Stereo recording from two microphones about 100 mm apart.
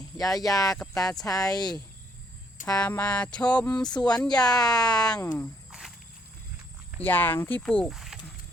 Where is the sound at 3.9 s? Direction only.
45° left (ahead or behind).